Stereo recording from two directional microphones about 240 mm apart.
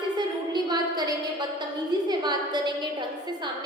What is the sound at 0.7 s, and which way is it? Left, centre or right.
A woman's voice, centre.